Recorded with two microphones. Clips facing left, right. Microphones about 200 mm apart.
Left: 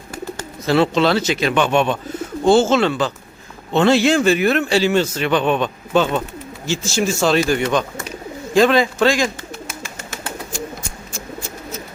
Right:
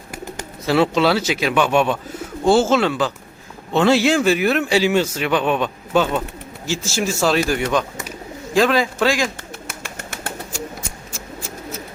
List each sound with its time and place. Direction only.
0.1 s a man's voice: 10° right (ahead or behind)
9.6 s bird: 60° right (ahead or behind)